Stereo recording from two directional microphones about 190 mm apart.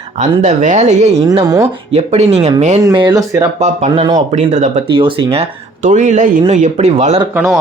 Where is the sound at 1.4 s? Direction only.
20° right (ahead or behind).